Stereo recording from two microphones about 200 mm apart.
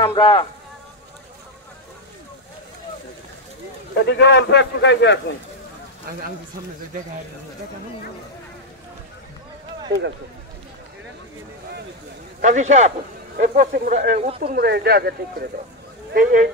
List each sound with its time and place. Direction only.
0.0 s speech: 25° left (ahead or behind)
4.0 s speech: 60° left (ahead or behind)
12.4 s a man's voice: 35° right (ahead or behind)